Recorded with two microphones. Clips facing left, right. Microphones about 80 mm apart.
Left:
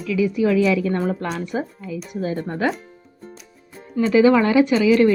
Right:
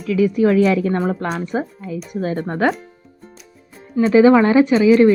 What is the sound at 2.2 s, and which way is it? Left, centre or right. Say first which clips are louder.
Speech: right 4 dB; right.